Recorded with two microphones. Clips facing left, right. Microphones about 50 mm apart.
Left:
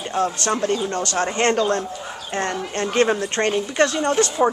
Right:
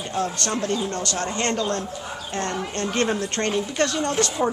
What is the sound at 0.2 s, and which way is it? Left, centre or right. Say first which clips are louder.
Speech: left 4 dB; left.